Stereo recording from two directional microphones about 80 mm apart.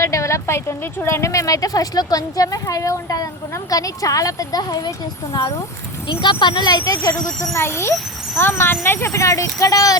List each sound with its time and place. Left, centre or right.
0.0 s speech: left
4.9 s speech: left
6.1 s speech: left
7.2 s speech: centre
7.5 s speech: left